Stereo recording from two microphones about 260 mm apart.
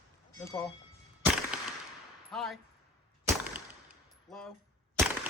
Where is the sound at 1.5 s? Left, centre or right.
Centre.